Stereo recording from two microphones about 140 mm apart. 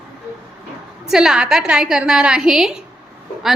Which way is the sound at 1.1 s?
5° right (ahead or behind).